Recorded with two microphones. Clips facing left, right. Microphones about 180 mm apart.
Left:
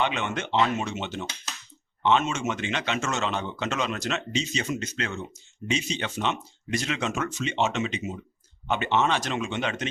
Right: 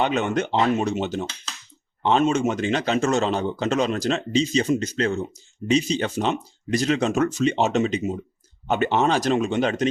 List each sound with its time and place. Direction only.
0.0 s speech: 40° right (ahead or behind)